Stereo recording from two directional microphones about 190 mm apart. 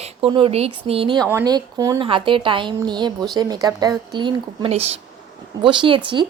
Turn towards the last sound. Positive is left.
turn(degrees=-25)  # may be behind; listen again after turning